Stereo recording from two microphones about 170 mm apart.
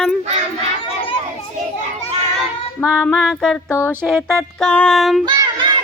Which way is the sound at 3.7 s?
15° left (ahead or behind).